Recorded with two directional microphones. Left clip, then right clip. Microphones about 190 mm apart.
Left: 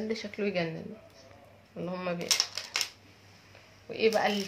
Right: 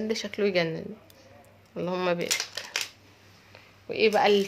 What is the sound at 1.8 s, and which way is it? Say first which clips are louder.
Speech: right 7 dB; 65° right (ahead or behind).